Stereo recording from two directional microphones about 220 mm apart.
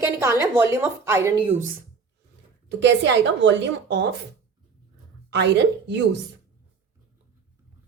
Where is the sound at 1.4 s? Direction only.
30° right (ahead or behind).